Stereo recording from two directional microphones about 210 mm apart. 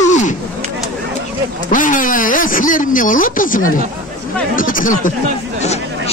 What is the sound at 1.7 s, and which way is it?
Speech, 40° left (ahead or behind).